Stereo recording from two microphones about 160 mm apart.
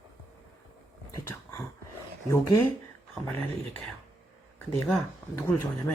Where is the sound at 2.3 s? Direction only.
15° left (ahead or behind).